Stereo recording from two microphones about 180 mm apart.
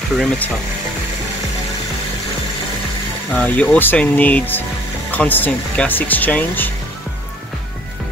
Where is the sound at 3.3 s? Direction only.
10° left (ahead or behind).